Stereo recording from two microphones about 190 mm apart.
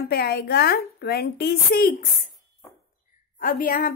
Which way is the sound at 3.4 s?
45° left (ahead or behind).